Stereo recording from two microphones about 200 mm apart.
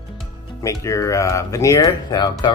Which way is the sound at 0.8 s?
15° left (ahead or behind).